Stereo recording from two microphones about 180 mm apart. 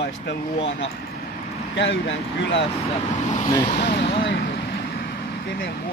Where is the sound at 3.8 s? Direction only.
70° left (ahead or behind).